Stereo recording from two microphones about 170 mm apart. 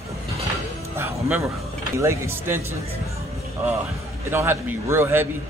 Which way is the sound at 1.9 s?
15° right (ahead or behind).